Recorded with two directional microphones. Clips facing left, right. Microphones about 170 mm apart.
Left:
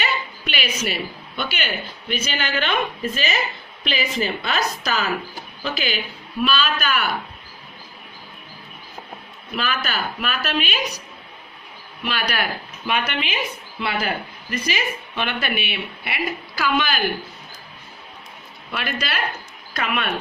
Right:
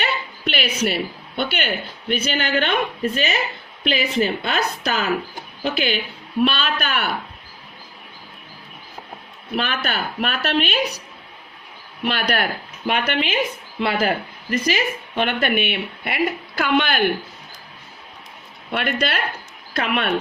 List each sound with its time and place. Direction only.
0.0 s a sound: 60° right (ahead or behind)
1.4 s speech: 60° right (ahead or behind)
9.6 s speech: 60° right (ahead or behind)
12.0 s speech: 55° right (ahead or behind)
14.5 s speech: 45° right (ahead or behind); by 17.1 s 65° right (ahead or behind)
18.7 s speech: 65° right (ahead or behind)